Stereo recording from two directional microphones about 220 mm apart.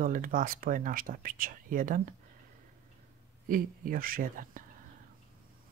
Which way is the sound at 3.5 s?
40° right (ahead or behind).